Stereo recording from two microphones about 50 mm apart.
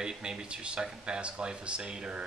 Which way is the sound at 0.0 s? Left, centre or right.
Centre.